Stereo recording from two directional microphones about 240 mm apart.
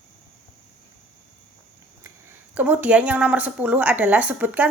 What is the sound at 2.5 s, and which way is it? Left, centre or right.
A woman's voice, centre.